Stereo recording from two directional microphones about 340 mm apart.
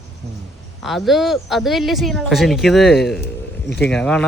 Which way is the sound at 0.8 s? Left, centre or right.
Centre.